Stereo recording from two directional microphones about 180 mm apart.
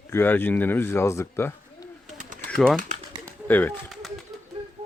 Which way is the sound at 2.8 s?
40° right (ahead or behind).